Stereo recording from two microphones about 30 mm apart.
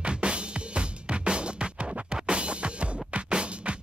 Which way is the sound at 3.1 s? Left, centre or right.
Right.